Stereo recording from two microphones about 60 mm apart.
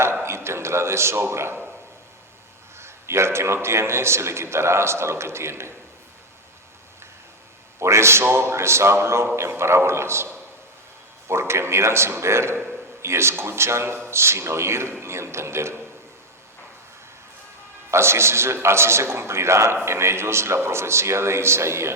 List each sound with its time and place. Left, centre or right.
0.0 s a man's voice: right
2.7 s a man's voice: right
7.8 s a man's voice: right
11.3 s a man's voice: right
17.9 s a man's voice: right